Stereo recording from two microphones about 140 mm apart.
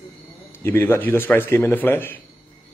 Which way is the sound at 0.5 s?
15° left (ahead or behind).